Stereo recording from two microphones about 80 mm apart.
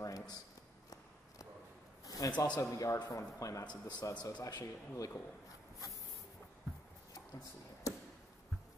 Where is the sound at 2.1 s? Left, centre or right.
Left.